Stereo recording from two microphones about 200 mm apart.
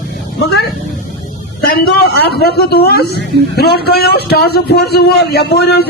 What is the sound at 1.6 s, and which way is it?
A man's voice, 50° left (ahead or behind).